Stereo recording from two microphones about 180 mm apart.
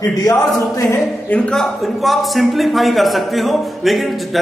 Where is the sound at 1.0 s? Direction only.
5° left (ahead or behind).